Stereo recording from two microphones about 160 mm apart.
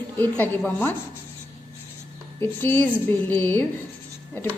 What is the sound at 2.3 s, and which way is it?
A woman's voice, 15° left (ahead or behind).